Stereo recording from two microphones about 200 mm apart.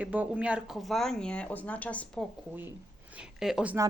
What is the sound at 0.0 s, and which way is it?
Speech, 5° right (ahead or behind).